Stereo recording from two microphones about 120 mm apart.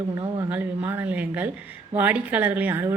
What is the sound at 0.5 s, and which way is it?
A woman's voice, 15° right (ahead or behind).